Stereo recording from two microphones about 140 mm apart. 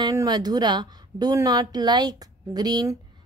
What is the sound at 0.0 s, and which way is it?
A woman's voice, 25° right (ahead or behind).